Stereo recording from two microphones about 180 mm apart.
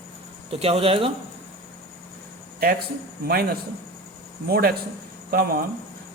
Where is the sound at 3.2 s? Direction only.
55° right (ahead or behind).